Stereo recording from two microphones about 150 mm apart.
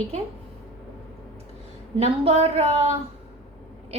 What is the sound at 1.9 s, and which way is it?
Speech, 40° right (ahead or behind).